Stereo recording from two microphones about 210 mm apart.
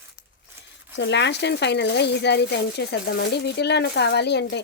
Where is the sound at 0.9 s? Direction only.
55° left (ahead or behind).